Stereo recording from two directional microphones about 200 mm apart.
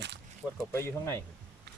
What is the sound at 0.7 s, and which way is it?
Speech, 15° left (ahead or behind).